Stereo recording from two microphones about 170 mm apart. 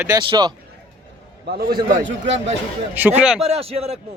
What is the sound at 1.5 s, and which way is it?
Speech, 65° right (ahead or behind).